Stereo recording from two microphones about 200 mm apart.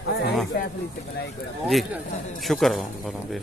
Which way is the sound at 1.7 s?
Centre (ahead or behind).